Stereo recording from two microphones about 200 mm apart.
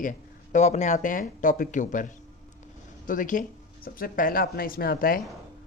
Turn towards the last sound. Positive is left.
turn(degrees=50)  # may be behind; listen again after turning